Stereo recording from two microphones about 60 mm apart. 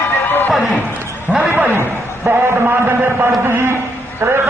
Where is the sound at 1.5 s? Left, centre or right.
Right.